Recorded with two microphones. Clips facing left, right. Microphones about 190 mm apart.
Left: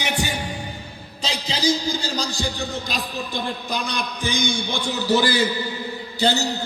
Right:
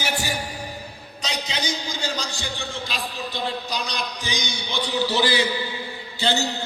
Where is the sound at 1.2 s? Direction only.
30° left (ahead or behind).